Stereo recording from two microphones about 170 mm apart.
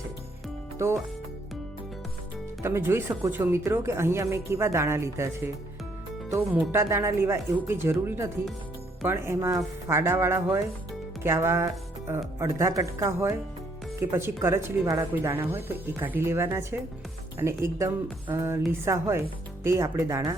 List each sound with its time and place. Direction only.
0.8 s speech: 15° right (ahead or behind)
2.6 s speech: 15° right (ahead or behind)
6.6 s speech: 15° right (ahead or behind)